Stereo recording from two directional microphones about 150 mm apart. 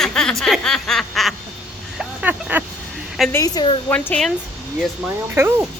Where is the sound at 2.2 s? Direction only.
10° right (ahead or behind).